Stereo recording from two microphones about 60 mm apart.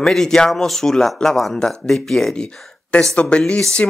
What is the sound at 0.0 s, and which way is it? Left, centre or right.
Speech, centre.